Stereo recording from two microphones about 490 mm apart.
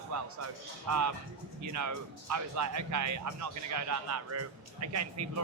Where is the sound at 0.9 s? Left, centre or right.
Right.